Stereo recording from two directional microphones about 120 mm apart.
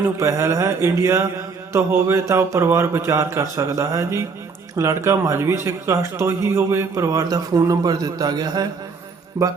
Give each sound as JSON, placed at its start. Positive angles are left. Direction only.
{"t": 0.0, "sound": "a man's voice", "side_deg": -25}
{"t": 9.4, "sound": "a man's voice", "side_deg": -15}